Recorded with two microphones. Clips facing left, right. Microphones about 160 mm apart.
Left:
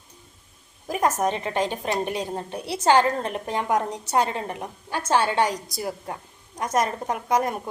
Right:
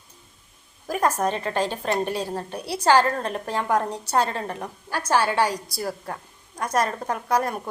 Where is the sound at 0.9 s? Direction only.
20° left (ahead or behind).